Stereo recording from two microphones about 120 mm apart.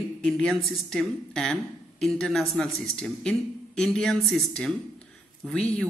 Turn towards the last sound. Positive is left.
turn(degrees=5)  # may be behind; listen again after turning